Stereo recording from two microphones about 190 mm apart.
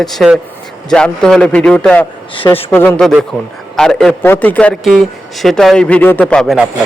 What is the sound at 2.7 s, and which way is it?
A man's voice, 10° left (ahead or behind).